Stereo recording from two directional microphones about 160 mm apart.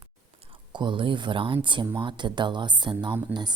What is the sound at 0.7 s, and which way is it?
Speech, 30° right (ahead or behind).